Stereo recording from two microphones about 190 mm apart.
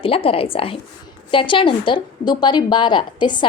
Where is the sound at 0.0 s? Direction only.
30° left (ahead or behind).